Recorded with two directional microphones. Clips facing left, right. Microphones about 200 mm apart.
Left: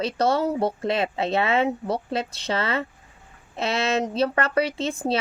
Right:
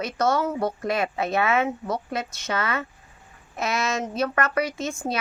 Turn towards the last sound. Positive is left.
turn(degrees=30)  # may be behind; listen again after turning